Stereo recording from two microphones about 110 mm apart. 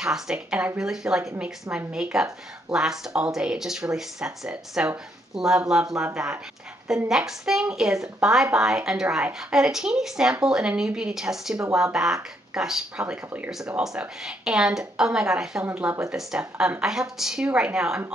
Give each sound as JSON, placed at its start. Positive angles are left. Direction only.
{"t": 0.0, "sound": "a woman's voice", "side_deg": -5}
{"t": 15.6, "sound": "a woman's voice", "side_deg": -15}
{"t": 16.1, "sound": "speech", "side_deg": -5}